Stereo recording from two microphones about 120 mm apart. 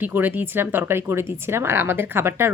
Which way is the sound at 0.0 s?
15° right (ahead or behind).